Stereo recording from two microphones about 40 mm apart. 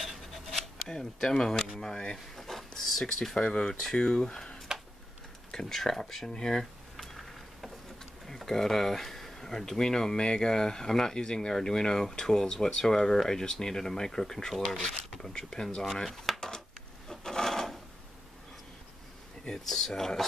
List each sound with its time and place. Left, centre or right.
0.0 s a sound: centre
0.6 s speech: centre
2.3 s speech: centre
3.3 s speech: left
4.7 s tick-tock: centre
5.7 s a sound: centre
8.5 s speech: centre
17.1 s filing: centre
19.7 s speech: centre